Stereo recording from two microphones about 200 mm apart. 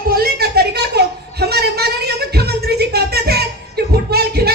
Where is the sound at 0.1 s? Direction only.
50° right (ahead or behind).